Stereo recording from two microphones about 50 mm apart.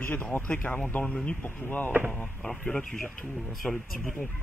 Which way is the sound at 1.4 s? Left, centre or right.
Left.